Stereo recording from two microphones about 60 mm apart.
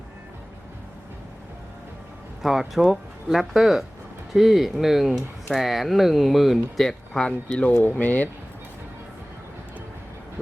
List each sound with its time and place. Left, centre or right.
2.4 s speech: centre
7.7 s speech: left